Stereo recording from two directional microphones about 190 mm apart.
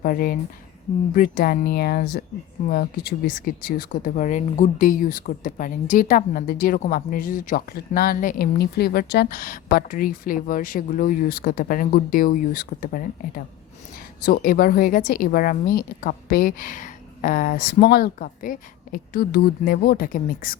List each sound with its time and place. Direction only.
0.0 s speech: 50° left (ahead or behind)